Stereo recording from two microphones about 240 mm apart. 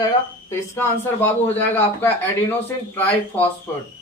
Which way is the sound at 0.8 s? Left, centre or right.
Centre.